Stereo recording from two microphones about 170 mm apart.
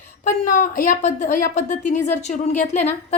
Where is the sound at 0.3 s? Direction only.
50° left (ahead or behind).